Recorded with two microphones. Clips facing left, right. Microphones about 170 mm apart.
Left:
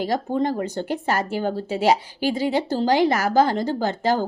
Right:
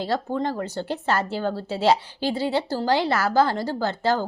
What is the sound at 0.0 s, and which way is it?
A woman's voice, 15° left (ahead or behind).